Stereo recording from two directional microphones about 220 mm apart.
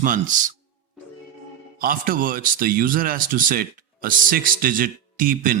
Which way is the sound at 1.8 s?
40° right (ahead or behind).